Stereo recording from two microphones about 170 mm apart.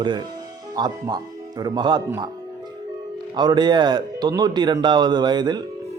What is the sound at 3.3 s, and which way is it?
Speech, 25° right (ahead or behind).